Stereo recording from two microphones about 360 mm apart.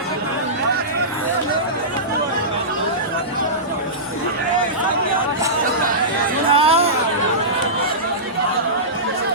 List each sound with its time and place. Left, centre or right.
6.5 s hubbub: centre